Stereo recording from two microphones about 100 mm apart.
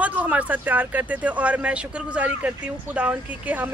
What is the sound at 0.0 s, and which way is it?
Speech, 15° right (ahead or behind).